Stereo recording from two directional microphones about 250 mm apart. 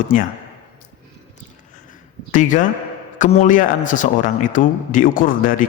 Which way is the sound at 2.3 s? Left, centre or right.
Left.